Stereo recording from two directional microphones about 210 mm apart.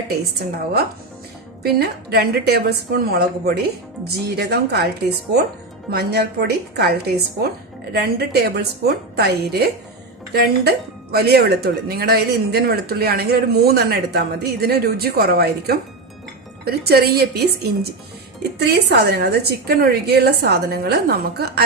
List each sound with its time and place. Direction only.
0.3 s speech: 50° right (ahead or behind)
5.9 s speech: 50° right (ahead or behind)
7.9 s speech: 50° right (ahead or behind)